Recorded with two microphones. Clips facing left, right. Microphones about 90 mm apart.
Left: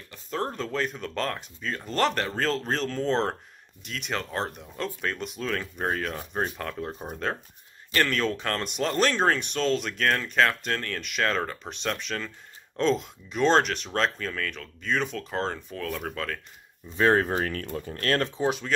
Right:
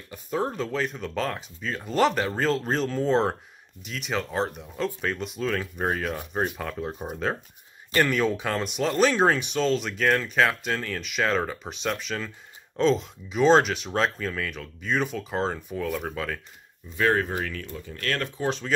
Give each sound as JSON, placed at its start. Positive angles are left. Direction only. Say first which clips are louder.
{"t": 0.1, "sound": "speech", "louder": "right 3 dB", "side_deg": -5}
{"t": 16.9, "sound": "speech", "louder": "left 2 dB", "side_deg": 30}